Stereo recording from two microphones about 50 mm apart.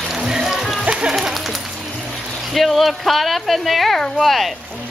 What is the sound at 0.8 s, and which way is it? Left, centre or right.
Music, centre.